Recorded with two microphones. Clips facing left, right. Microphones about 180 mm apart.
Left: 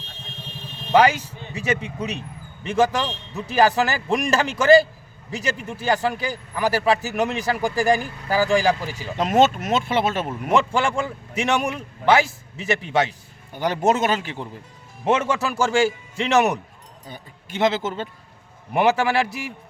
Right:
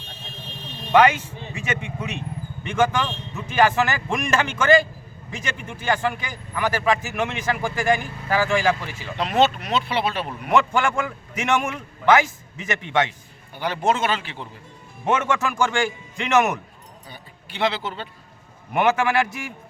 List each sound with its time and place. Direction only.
0.9 s a man's voice: 35° left (ahead or behind)
10.5 s a man's voice: 30° left (ahead or behind)
17.1 s speech: 45° left (ahead or behind)
18.7 s a man's voice: 35° left (ahead or behind)